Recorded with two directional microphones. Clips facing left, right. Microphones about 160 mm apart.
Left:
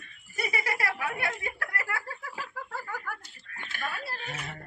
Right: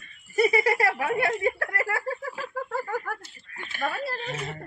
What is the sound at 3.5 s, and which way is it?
Chicken, 25° right (ahead or behind).